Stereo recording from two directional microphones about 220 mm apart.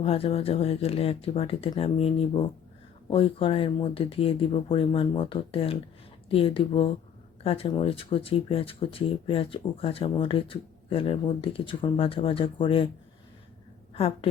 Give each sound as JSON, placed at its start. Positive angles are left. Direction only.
{"t": 0.0, "sound": "speech", "side_deg": 25}
{"t": 13.9, "sound": "a woman's voice", "side_deg": 25}